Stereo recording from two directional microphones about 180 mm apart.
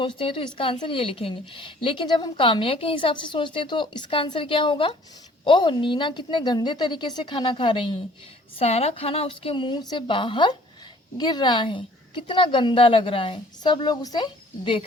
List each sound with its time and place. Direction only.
0.0 s a woman's voice: 30° left (ahead or behind)